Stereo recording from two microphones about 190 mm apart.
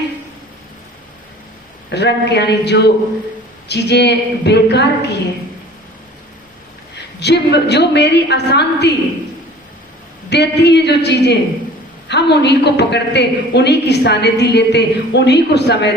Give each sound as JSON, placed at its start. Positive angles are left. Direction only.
{"t": 1.9, "sound": "a woman's voice", "side_deg": 65}
{"t": 6.9, "sound": "a woman's voice", "side_deg": 60}
{"t": 10.2, "sound": "a woman's voice", "side_deg": 60}